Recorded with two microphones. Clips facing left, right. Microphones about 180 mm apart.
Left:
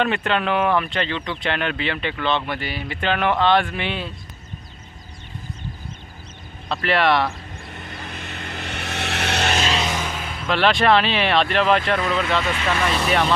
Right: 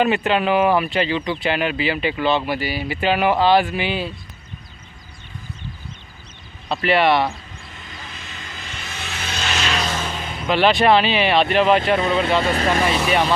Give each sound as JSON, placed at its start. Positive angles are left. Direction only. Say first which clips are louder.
{"t": 0.0, "sound": "speech", "louder": "right 3 dB", "side_deg": -5}
{"t": 6.7, "sound": "speech", "louder": "right 2 dB", "side_deg": 0}
{"t": 7.7, "sound": "vehicle", "louder": "left 5 dB", "side_deg": 55}
{"t": 9.6, "sound": "a sound", "louder": "left 1 dB", "side_deg": 30}
{"t": 9.8, "sound": "music", "louder": "even", "side_deg": 10}
{"t": 10.4, "sound": "speech", "louder": "right 2 dB", "side_deg": 0}
{"t": 11.8, "sound": "speech", "louder": "right 3 dB", "side_deg": -25}
{"t": 12.9, "sound": "speech", "louder": "right 1 dB", "side_deg": -5}